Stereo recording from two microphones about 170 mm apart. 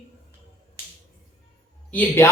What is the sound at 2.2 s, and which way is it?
Speech, 15° left (ahead or behind).